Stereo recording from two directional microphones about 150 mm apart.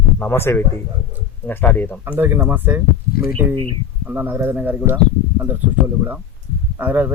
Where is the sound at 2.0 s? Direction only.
15° right (ahead or behind).